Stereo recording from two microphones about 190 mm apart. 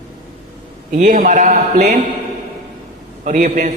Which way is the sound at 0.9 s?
40° right (ahead or behind).